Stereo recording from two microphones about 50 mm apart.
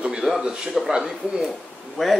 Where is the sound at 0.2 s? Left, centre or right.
Centre.